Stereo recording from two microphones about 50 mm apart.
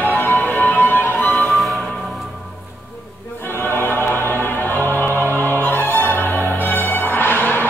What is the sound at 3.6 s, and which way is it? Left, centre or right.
Choir, left.